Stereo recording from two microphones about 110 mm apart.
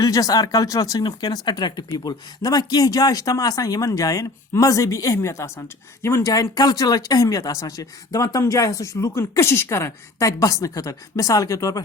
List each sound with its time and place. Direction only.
0.0 s speech: 35° left (ahead or behind)